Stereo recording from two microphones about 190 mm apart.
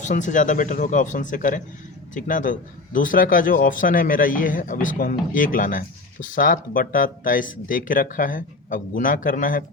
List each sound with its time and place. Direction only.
0.0 s a man's voice: 40° left (ahead or behind)